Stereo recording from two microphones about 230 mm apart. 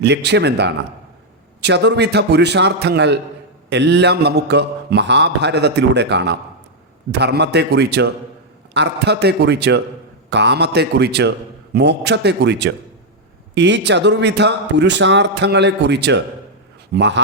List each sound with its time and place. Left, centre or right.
0.0 s a man's voice: right